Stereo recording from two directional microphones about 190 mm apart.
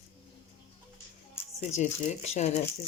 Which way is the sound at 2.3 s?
35° left (ahead or behind).